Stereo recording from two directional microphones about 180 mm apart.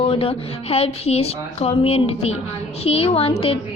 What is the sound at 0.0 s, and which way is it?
Speech, 30° left (ahead or behind).